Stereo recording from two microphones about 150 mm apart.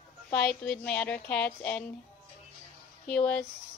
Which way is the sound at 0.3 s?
10° left (ahead or behind).